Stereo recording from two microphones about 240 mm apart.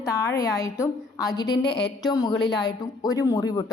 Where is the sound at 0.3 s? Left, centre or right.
Centre.